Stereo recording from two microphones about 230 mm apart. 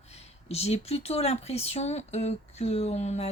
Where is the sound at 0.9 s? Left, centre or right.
Left.